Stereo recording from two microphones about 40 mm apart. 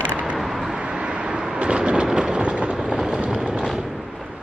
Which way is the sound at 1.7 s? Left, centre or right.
Right.